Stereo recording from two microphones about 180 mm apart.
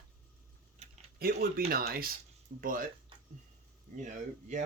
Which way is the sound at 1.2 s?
55° right (ahead or behind).